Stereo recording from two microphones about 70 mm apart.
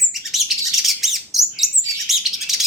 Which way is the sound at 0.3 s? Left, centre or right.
Centre.